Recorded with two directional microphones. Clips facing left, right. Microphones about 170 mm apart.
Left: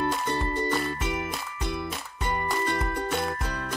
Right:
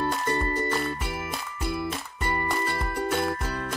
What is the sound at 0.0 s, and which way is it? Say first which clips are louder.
Music: right 1 dB; centre (ahead or behind).